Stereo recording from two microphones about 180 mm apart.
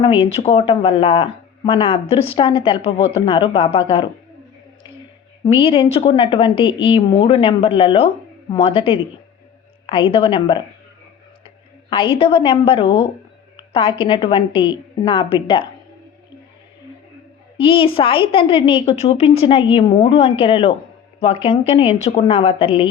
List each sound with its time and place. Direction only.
0.0 s speech: 30° left (ahead or behind)
5.5 s a woman's voice: 30° left (ahead or behind)
17.6 s speech: 30° left (ahead or behind)